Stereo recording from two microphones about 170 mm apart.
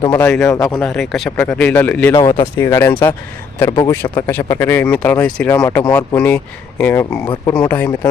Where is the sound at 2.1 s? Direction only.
30° left (ahead or behind).